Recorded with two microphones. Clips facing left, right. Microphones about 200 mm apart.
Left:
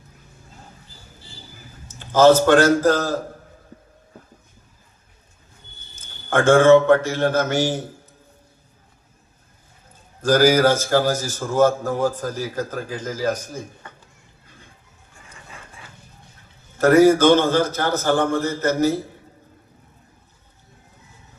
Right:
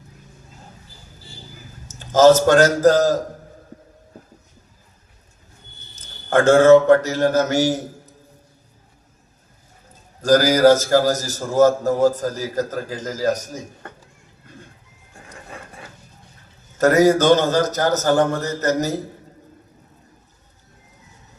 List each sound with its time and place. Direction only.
1.9 s a man's voice: 40° right (ahead or behind)
6.0 s a man's voice: 40° right (ahead or behind)
10.2 s a man's voice: 40° right (ahead or behind)
16.7 s a man's voice: 40° right (ahead or behind)